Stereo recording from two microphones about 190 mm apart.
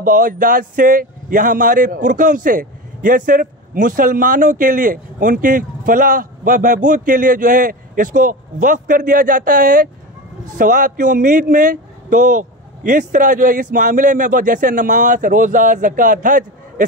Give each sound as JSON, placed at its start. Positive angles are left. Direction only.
{"t": 0.0, "sound": "speech", "side_deg": -45}